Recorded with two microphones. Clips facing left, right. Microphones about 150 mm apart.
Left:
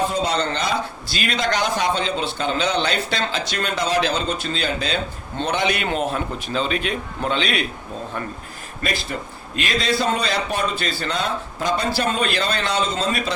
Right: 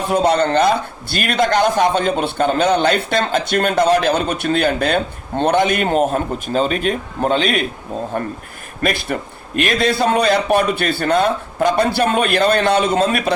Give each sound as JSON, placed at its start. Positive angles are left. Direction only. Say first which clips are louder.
{"t": 0.1, "sound": "speech", "louder": "right 8 dB", "side_deg": -55}
{"t": 8.8, "sound": "a man's voice", "louder": "right 6 dB", "side_deg": -60}